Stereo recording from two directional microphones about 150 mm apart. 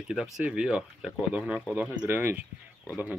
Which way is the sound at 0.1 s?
5° right (ahead or behind).